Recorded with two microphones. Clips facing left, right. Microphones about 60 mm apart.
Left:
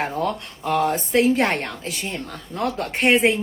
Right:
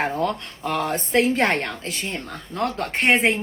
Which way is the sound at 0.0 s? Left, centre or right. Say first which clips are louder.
Right 1 dB; right.